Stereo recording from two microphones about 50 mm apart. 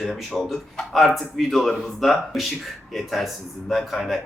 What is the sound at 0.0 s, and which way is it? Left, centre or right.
Speech, centre.